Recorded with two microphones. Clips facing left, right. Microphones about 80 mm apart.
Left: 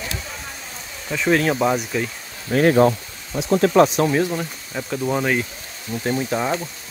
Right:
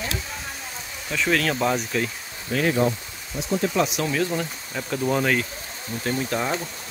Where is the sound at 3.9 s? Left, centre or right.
Left.